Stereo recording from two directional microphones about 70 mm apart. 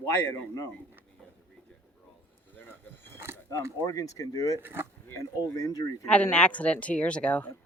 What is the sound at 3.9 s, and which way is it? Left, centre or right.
Speech, left.